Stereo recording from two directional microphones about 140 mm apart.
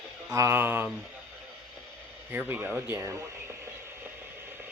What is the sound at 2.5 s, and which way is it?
Speech, 15° right (ahead or behind).